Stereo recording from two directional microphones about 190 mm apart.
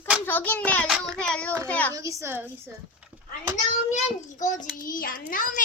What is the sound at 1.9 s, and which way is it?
A woman's voice, 15° right (ahead or behind).